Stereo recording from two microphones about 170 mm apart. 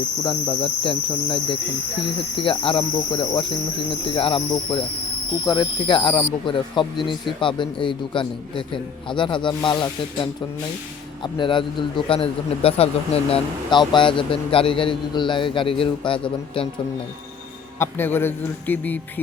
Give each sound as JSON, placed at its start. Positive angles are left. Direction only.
{"t": 0.3, "sound": "a man's voice", "side_deg": 30}
{"t": 17.7, "sound": "a man's voice", "side_deg": 15}